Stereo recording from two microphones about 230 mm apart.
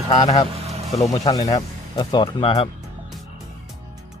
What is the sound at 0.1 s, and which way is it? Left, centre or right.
Speech, left.